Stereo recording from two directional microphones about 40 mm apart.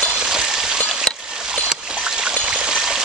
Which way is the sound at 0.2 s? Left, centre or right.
Centre.